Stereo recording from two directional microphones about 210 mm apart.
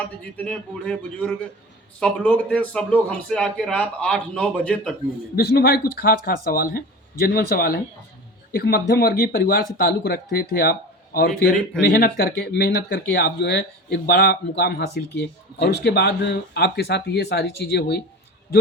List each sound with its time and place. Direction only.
0.3 s a man's voice: 5° left (ahead or behind)
5.4 s speech: 50° left (ahead or behind)